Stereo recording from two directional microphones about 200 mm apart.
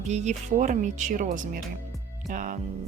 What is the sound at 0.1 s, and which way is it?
Speech, 35° right (ahead or behind).